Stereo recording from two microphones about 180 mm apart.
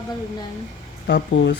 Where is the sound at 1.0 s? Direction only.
75° left (ahead or behind).